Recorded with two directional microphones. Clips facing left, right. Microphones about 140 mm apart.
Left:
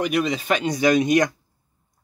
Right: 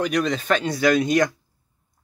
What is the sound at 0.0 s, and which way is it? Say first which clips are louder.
Speech: even; 5° left (ahead or behind).